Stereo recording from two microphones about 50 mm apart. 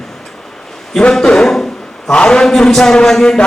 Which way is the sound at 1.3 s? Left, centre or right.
Centre.